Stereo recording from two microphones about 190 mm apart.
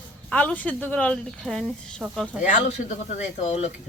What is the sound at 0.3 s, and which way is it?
Speech, 5° left (ahead or behind).